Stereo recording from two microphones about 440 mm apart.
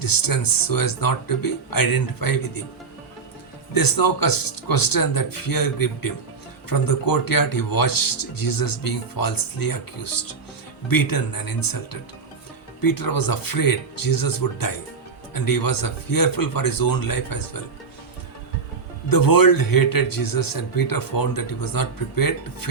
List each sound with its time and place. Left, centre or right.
0.0 s speech: left
3.8 s speech: left
19.0 s speech: left